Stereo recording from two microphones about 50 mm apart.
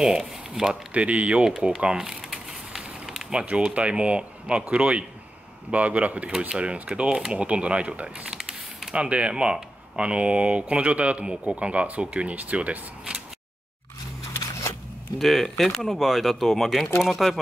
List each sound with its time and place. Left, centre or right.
0.0 s speech: centre
0.9 s speech: right
2.0 s a sound: centre
3.3 s speech: right
8.3 s a sound: centre
8.9 s speech: right
15.1 s speech: centre